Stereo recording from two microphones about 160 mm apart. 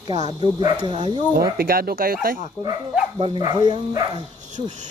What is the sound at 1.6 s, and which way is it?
Speech, 70° right (ahead or behind).